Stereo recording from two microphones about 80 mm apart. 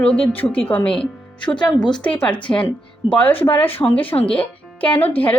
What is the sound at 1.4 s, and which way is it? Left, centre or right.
Speech, left.